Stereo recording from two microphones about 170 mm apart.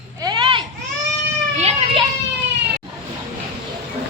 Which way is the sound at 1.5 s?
40° right (ahead or behind).